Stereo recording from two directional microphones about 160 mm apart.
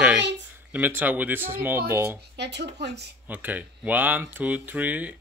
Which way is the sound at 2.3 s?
90° right.